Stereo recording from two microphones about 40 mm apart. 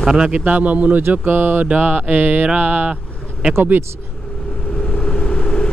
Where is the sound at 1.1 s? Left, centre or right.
Right.